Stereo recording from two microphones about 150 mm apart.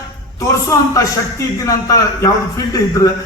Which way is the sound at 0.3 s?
20° left (ahead or behind).